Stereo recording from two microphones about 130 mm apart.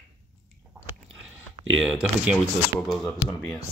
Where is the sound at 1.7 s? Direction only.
Centre (ahead or behind).